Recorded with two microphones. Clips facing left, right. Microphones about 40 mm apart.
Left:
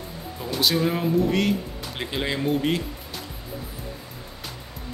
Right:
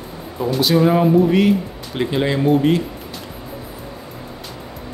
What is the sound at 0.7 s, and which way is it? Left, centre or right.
Speech, centre.